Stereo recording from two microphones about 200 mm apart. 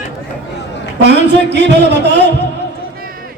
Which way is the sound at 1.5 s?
60° right (ahead or behind).